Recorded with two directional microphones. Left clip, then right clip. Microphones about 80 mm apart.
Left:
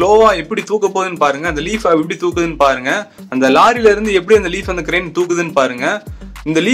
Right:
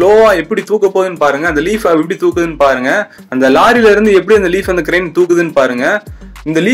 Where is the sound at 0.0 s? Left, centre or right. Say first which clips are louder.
Right 3 dB; right.